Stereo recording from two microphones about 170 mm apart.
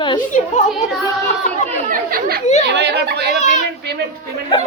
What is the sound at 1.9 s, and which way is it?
Chatter, 55° right (ahead or behind).